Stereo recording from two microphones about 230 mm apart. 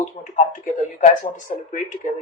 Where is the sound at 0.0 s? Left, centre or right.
Left.